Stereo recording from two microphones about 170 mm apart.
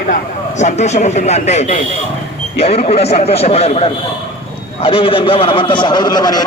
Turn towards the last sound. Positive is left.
turn(degrees=25)  # may be behind; listen again after turning